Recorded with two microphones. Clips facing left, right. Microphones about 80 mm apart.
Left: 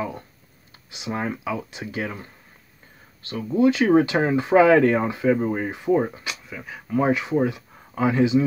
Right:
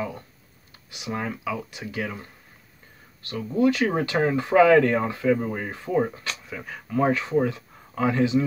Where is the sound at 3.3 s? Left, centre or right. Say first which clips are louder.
Left 2 dB; left; by 6.8 s centre.